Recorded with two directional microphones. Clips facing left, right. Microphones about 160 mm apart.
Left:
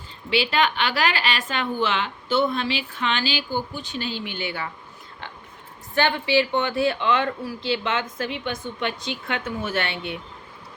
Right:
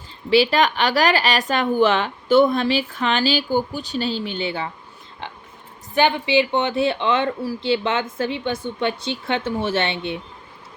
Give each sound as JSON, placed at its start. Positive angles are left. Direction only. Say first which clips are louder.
{"t": 0.3, "sound": "a woman's voice", "louder": "right 5 dB", "side_deg": -40}